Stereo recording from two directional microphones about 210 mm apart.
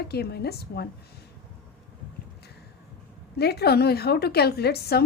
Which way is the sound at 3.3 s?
50° left (ahead or behind).